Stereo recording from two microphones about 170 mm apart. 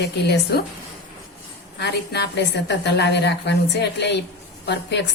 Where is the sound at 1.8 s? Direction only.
80° left.